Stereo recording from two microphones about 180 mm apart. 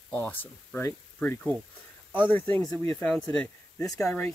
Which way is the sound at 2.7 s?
15° left (ahead or behind).